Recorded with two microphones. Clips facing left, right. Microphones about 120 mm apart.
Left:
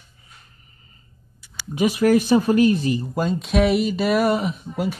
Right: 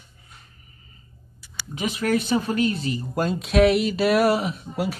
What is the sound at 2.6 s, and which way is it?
Speech, 30° right (ahead or behind).